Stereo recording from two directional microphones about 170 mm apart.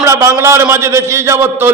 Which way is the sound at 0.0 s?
15° right (ahead or behind).